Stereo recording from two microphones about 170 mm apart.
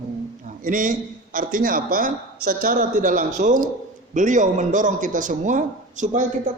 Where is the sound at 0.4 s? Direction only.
50° right (ahead or behind).